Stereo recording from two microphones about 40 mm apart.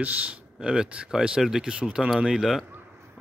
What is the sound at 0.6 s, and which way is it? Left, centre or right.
Speech, centre.